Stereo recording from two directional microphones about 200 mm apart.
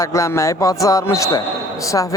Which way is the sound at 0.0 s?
15° left (ahead or behind).